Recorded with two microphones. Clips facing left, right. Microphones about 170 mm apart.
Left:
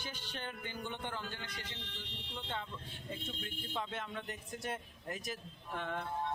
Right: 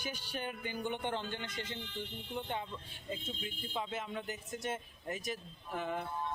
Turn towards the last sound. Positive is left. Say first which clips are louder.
# right 2 dB
turn(degrees=-5)  # may be behind; listen again after turning